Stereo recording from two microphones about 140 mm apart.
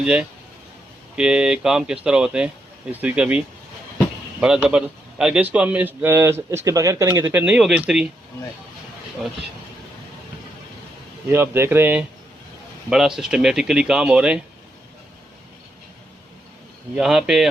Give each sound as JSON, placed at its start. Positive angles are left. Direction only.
{"t": 0.0, "sound": "a man's voice", "side_deg": -5}
{"t": 11.3, "sound": "a man's voice", "side_deg": -15}
{"t": 16.9, "sound": "speech", "side_deg": -5}